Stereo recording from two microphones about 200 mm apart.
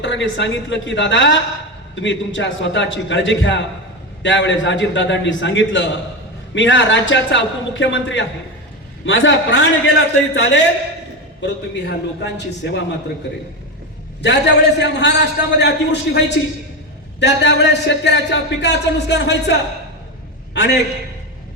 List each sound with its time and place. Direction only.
0.0 s a man's voice: 65° left (ahead or behind)
11.3 s speech: 60° left (ahead or behind)
14.2 s a man's voice: 60° left (ahead or behind)